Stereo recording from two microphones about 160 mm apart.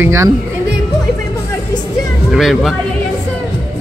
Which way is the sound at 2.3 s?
Centre (ahead or behind).